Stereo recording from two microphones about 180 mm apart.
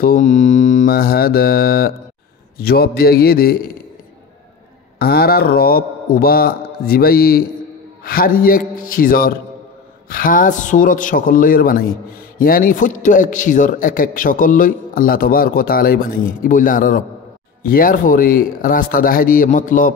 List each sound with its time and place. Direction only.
0.0 s speech: 45° left (ahead or behind)
4.9 s a man's voice: 60° left (ahead or behind)